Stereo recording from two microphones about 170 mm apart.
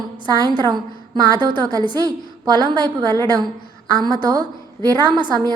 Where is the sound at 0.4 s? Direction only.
25° right (ahead or behind).